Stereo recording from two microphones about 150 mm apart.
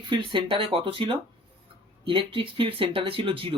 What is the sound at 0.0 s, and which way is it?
Speech, 35° right (ahead or behind).